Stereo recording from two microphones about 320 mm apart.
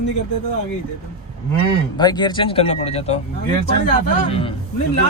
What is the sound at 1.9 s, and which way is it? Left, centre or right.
Speech, centre.